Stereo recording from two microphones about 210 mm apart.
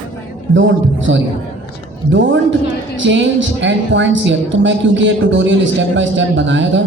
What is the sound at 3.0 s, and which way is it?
Speech, 60° right (ahead or behind).